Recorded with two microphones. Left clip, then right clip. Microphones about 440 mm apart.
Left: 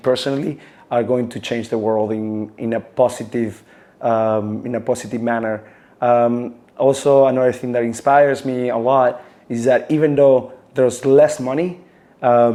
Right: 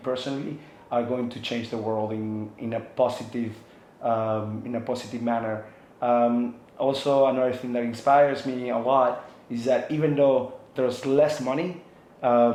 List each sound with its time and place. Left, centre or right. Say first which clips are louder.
0.0 s speech: left 11 dB; left